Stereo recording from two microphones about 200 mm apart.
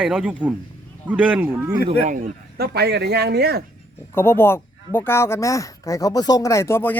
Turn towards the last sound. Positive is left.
turn(degrees=10)  # may be behind; listen again after turning